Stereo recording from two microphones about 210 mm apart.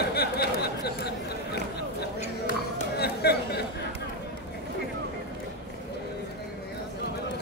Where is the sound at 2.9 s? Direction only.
50° left (ahead or behind).